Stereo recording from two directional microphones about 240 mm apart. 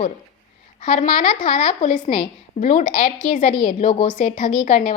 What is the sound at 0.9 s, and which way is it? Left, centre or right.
A woman's voice, left.